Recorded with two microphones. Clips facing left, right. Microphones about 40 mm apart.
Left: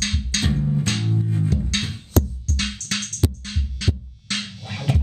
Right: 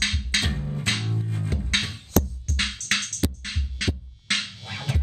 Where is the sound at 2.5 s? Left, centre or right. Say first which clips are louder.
Right 1 dB; right.